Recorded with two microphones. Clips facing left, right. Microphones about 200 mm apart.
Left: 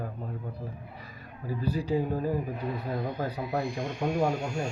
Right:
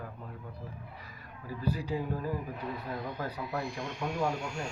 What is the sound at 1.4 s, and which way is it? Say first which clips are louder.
Speech: left 4 dB; 25° left (ahead or behind).